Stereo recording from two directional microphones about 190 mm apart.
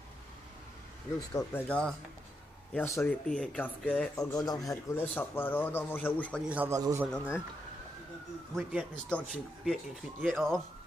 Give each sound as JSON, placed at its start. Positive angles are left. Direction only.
{"t": 1.3, "sound": "speech", "side_deg": 10}
{"t": 4.2, "sound": "speech", "side_deg": 20}
{"t": 6.5, "sound": "a man's voice", "side_deg": -10}
{"t": 7.1, "sound": "speech", "side_deg": 10}
{"t": 8.5, "sound": "speech", "side_deg": 5}